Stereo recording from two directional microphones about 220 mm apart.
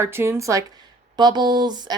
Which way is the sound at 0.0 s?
10° right (ahead or behind).